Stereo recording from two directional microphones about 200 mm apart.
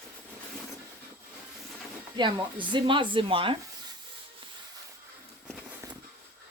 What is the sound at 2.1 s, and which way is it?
Speech, 25° right (ahead or behind).